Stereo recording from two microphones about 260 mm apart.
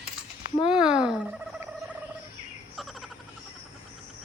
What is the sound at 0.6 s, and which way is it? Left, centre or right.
Speech, centre.